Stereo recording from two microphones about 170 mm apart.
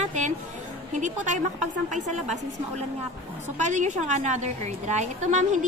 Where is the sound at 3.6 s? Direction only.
45° right (ahead or behind).